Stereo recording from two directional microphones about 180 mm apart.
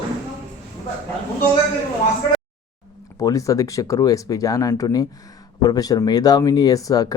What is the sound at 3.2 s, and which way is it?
Speech, 20° left (ahead or behind).